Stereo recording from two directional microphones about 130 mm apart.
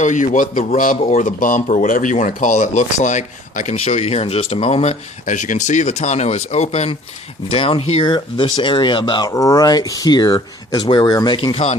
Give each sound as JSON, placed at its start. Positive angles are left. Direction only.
{"t": 0.0, "sound": "a man's voice", "side_deg": 70}
{"t": 1.0, "sound": "speech", "side_deg": 70}
{"t": 9.3, "sound": "speech", "side_deg": 25}
{"t": 11.3, "sound": "speech", "side_deg": 45}